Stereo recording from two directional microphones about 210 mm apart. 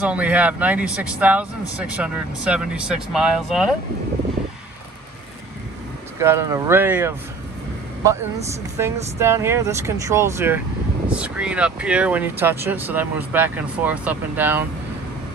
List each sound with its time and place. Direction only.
0.0 s speech: 5° right (ahead or behind)
6.2 s speech: 10° right (ahead or behind)
8.7 s speech: 10° right (ahead or behind)